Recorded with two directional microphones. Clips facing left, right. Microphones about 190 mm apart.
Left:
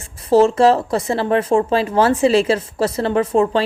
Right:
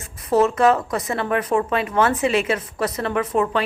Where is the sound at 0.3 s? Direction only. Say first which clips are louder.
Left 4 dB; 30° left (ahead or behind).